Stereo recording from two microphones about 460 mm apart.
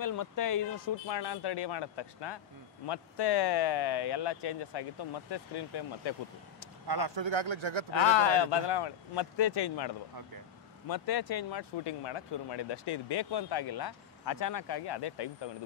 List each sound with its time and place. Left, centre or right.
0.0 s speech: left
6.9 s speech: right
8.0 s speech: left